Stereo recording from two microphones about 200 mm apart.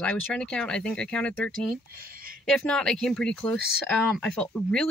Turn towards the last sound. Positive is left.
turn(degrees=5)  # may be behind; listen again after turning